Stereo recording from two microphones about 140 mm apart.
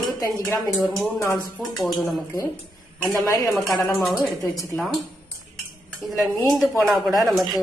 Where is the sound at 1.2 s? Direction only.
20° left (ahead or behind).